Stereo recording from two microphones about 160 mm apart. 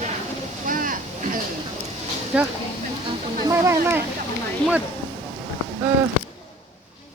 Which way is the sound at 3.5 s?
15° right (ahead or behind).